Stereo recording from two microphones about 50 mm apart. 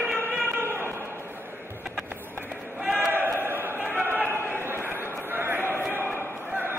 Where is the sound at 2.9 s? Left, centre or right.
Right.